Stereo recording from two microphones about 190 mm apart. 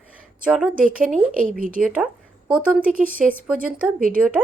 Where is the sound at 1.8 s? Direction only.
Centre (ahead or behind).